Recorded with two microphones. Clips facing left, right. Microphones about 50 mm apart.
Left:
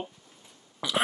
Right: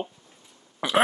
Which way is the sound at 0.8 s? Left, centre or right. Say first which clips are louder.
Right 5 dB; right.